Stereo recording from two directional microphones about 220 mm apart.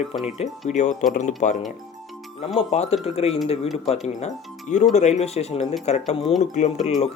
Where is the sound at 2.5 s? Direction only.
30° left (ahead or behind).